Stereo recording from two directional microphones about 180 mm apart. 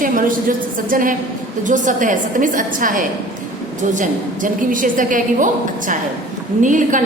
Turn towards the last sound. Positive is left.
turn(degrees=-45)  # may be behind; listen again after turning